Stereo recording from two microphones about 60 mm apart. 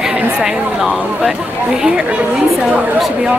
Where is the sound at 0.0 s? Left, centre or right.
Centre.